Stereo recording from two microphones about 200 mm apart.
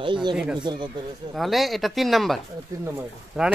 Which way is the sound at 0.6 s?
25° right (ahead or behind).